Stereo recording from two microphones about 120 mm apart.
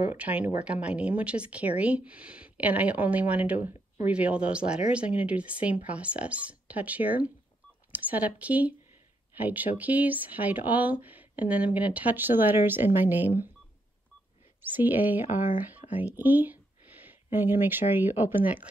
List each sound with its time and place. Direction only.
0.0 s speech: 10° right (ahead or behind)
14.6 s speech: 15° right (ahead or behind)